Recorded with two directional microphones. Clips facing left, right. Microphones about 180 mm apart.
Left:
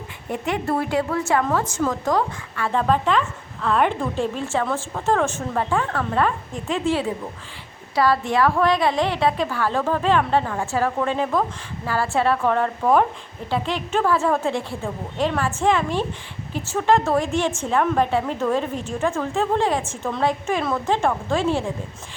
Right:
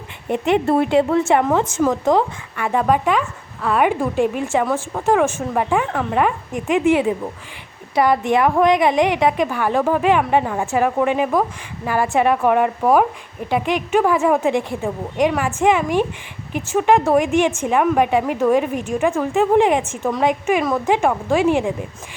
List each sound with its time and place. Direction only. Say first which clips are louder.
0.3 s a woman's voice: right 7 dB; 25° right (ahead or behind)